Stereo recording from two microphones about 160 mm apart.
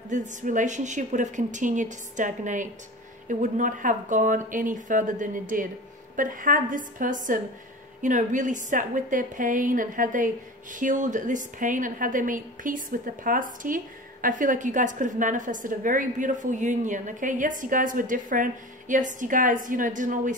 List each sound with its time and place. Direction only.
0.1 s a woman's voice: 50° right (ahead or behind)